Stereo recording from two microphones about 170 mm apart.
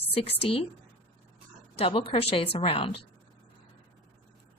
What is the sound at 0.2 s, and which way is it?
Speech, 35° left (ahead or behind).